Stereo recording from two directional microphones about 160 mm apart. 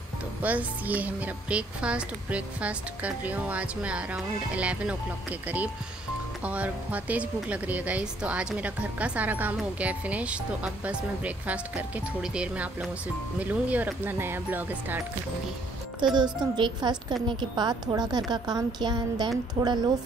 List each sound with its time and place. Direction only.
0.4 s speech: 10° right (ahead or behind)
16.2 s a woman's voice: 30° right (ahead or behind)